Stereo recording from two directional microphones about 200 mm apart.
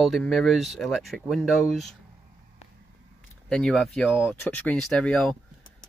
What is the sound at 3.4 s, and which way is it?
Speech, 5° left (ahead or behind).